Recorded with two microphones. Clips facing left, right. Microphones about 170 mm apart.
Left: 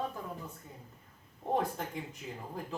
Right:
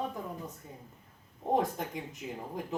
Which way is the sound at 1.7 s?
15° right (ahead or behind).